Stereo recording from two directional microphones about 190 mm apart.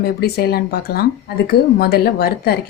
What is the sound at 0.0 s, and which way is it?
Speech, 55° left (ahead or behind).